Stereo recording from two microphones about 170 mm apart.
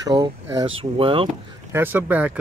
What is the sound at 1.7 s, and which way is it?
Speech, 10° right (ahead or behind).